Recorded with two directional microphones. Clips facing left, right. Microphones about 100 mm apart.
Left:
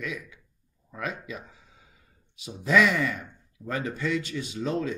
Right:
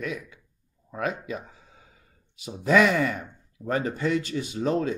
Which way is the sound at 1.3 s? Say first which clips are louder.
Right 5 dB; 35° right (ahead or behind).